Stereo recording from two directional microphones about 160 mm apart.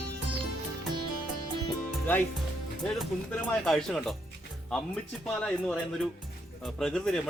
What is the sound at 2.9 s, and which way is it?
Speech, centre (ahead or behind).